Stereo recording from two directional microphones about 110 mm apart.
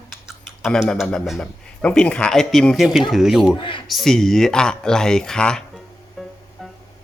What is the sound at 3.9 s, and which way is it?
Speech, centre (ahead or behind).